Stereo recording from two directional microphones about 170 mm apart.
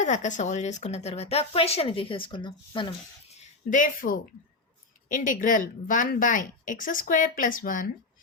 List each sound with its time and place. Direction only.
0.0 s speech: 45° left (ahead or behind); by 2.9 s 30° left (ahead or behind)
3.3 s speech: 50° left (ahead or behind)